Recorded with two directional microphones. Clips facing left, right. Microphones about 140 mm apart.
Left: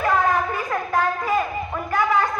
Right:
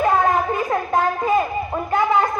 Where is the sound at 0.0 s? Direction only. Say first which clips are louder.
Right 3 dB; 25° right (ahead or behind).